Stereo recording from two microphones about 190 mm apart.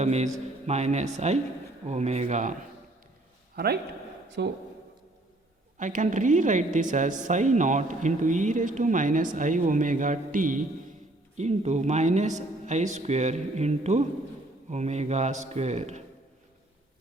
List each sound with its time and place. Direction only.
0.0 s a man's voice: 35° right (ahead or behind)
3.5 s a man's voice: 55° right (ahead or behind)
4.3 s speech: 65° right (ahead or behind)
5.7 s speech: 40° right (ahead or behind)